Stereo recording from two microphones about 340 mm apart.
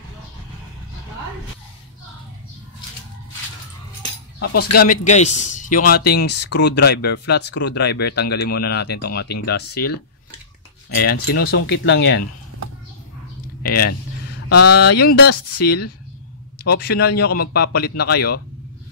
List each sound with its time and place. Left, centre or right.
4.4 s speech: left
11.0 s speech: left
13.6 s speech: left